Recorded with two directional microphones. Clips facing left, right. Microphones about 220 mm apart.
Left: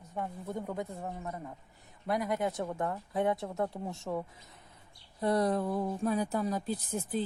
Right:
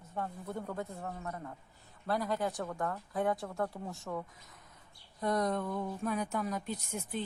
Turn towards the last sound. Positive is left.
turn(degrees=35)  # may be behind; listen again after turning